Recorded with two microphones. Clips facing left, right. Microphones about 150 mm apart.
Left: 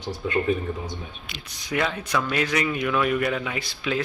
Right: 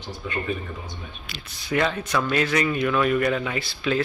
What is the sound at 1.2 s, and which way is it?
Speech, 20° left (ahead or behind).